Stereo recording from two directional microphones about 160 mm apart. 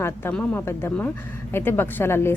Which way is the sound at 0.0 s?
15° left (ahead or behind).